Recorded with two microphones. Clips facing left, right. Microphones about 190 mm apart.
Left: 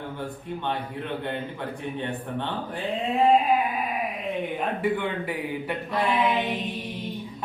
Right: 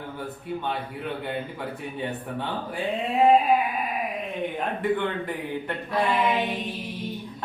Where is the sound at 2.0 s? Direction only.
5° right (ahead or behind).